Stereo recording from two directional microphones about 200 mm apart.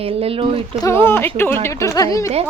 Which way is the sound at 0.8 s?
10° left (ahead or behind).